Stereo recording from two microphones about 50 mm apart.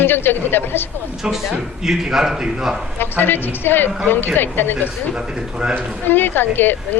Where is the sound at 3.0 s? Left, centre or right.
Left.